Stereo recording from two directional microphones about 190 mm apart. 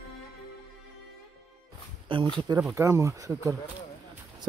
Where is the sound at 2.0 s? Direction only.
25° right (ahead or behind).